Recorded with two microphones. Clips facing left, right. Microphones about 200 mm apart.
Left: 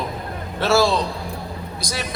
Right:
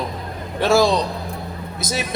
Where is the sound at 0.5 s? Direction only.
15° right (ahead or behind).